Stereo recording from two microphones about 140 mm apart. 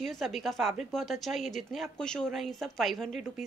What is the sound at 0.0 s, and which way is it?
A woman's voice, centre (ahead or behind).